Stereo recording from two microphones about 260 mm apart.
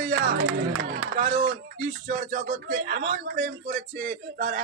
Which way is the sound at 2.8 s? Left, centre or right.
Right.